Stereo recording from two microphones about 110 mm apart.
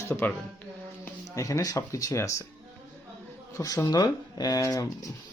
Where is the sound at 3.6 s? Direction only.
30° left (ahead or behind).